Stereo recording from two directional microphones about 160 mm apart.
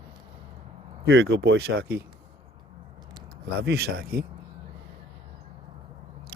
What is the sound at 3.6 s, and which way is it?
Speech, 85° right.